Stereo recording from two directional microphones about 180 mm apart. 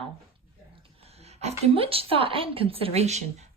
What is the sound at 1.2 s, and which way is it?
A woman's voice, 35° right (ahead or behind).